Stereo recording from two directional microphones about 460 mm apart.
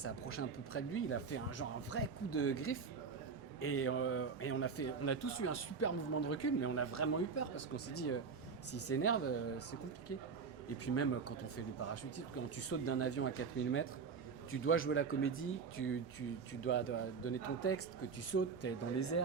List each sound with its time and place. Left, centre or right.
0.0 s a man's voice: left
10.7 s a man's voice: left